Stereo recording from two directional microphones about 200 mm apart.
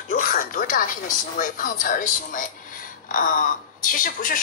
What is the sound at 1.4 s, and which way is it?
Speech, 40° left (ahead or behind).